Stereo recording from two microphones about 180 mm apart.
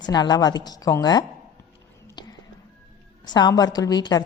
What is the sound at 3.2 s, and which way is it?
Speech, 25° left (ahead or behind).